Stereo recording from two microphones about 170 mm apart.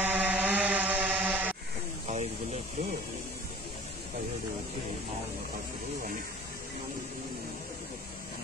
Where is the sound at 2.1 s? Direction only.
45° right (ahead or behind).